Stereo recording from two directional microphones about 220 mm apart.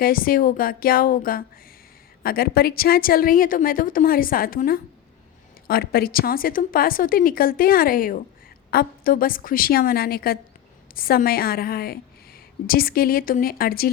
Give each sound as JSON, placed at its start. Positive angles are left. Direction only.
{"t": 0.0, "sound": "a woman's voice", "side_deg": 40}